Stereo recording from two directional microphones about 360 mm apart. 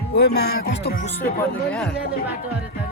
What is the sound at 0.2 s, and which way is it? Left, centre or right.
Speech, left.